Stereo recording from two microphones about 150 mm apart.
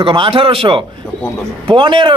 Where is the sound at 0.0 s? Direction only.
35° right (ahead or behind).